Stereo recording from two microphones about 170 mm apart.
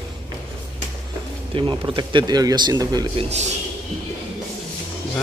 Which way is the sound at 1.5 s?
30° right (ahead or behind).